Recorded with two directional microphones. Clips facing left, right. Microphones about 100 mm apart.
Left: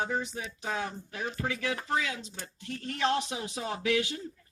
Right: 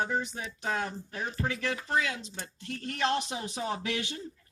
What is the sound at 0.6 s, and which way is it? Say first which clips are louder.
Speech: right 2 dB; 55° right (ahead or behind).